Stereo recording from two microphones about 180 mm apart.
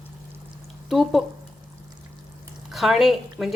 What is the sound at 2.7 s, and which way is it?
Speech, centre (ahead or behind).